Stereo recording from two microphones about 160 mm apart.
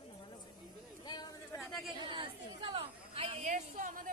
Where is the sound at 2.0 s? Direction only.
30° right (ahead or behind).